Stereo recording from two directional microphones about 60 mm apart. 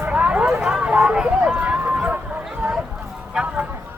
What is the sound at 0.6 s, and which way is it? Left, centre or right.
Run, centre.